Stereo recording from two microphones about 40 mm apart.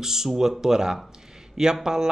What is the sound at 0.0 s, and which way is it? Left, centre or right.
Speech, centre.